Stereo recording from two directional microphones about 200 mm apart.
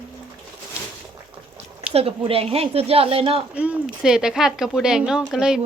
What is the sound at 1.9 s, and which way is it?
Speech, 30° right (ahead or behind).